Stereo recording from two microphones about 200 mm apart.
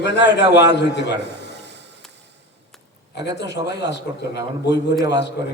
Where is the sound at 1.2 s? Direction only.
60° right (ahead or behind).